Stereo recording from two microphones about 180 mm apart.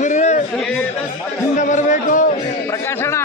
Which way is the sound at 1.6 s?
45° left (ahead or behind).